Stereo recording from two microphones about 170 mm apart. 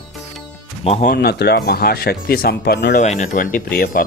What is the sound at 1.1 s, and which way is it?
Speech, 70° left (ahead or behind).